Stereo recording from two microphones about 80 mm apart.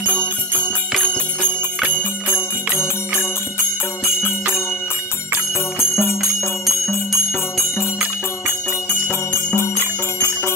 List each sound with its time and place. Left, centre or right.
0.0 s jingle bell: right
5.8 s jingle bell: left